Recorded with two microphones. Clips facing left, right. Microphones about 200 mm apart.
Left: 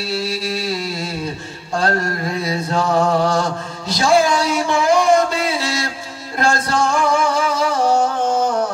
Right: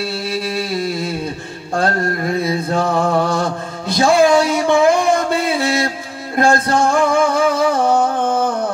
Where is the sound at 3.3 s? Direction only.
55° right (ahead or behind).